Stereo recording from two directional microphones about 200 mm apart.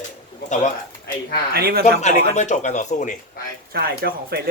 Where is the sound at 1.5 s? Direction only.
50° right (ahead or behind).